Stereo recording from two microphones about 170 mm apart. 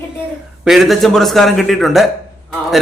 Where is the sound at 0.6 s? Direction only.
Centre (ahead or behind).